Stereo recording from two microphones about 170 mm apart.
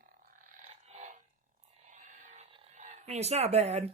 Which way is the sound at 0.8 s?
40° right (ahead or behind).